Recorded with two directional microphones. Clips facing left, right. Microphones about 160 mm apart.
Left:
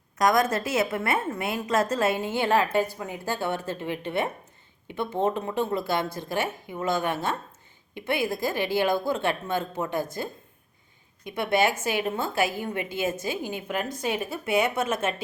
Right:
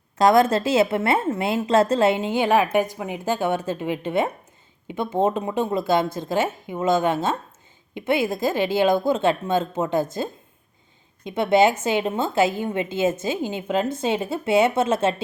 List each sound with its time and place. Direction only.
0.2 s a woman's voice: 30° right (ahead or behind)